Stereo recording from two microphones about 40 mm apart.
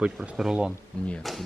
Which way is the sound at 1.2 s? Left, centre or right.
Centre.